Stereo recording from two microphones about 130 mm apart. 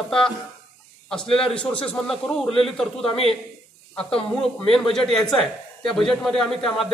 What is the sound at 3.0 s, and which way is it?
Speech, 50° left (ahead or behind).